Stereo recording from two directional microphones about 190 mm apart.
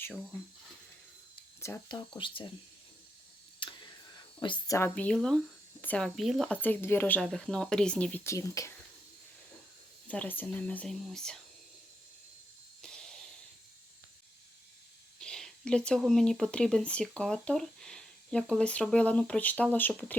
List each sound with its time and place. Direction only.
0.0 s speech: 5° left (ahead or behind)
1.6 s speech: 15° left (ahead or behind)
2.1 s speech: 25° left (ahead or behind)
3.6 s tick: 25° left (ahead or behind)
4.4 s speech: 25° left (ahead or behind)
10.1 s speech: 10° left (ahead or behind)
12.8 s a sound: 5° left (ahead or behind)
15.2 s speech: 5° left (ahead or behind)